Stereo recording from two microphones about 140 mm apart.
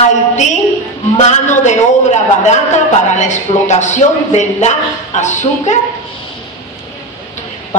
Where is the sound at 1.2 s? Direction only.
55° left (ahead or behind).